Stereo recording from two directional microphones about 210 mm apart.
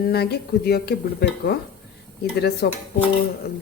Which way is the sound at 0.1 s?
50° left (ahead or behind).